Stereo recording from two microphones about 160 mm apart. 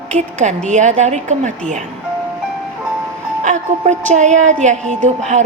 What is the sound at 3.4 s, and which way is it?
A woman's voice, 50° right (ahead or behind).